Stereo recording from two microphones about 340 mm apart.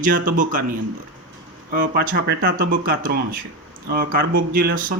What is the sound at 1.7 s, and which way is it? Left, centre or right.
Speech, right.